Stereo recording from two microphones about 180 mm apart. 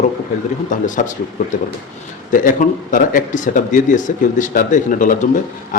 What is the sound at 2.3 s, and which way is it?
Speech, 50° left (ahead or behind).